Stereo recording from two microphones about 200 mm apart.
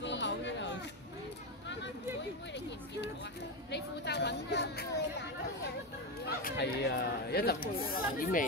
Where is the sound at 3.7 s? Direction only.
55° left (ahead or behind).